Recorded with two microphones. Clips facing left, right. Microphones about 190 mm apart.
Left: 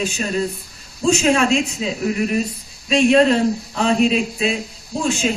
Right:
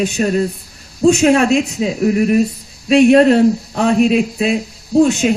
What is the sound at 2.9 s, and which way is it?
A man's voice, 60° right (ahead or behind).